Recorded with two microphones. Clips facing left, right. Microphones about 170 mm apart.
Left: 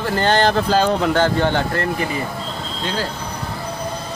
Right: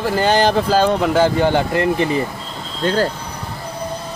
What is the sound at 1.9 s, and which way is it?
Speech, 30° right (ahead or behind).